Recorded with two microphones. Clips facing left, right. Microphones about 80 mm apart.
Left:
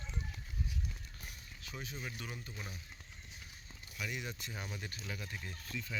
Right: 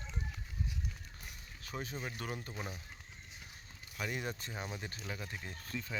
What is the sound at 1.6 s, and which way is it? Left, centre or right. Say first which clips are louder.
Speech: right 4 dB; right.